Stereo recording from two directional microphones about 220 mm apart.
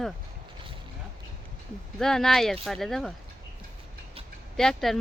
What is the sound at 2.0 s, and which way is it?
Speech, centre (ahead or behind).